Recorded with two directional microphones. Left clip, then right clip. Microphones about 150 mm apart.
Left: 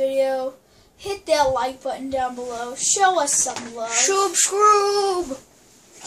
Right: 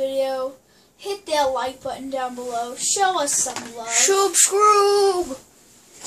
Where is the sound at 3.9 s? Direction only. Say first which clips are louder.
Right 2 dB; 35° right (ahead or behind).